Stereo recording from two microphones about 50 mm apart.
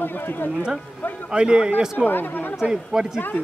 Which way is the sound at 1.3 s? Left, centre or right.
Centre.